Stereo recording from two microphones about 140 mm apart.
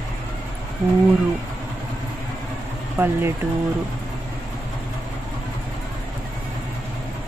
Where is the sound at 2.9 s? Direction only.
15° right (ahead or behind).